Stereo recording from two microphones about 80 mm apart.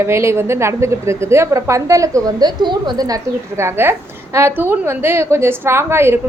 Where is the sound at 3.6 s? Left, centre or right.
Right.